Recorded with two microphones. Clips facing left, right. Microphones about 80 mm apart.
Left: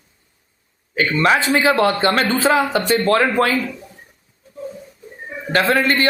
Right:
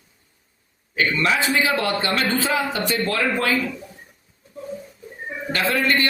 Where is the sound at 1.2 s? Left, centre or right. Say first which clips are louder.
Left 6 dB; left.